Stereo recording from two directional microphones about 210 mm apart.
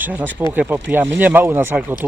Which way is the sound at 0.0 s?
10° right (ahead or behind).